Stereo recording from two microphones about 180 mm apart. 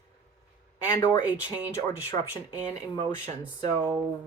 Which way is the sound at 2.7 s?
40° right (ahead or behind).